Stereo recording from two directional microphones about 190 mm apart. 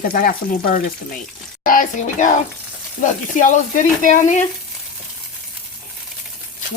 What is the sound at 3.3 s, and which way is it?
Frying, 45° left (ahead or behind).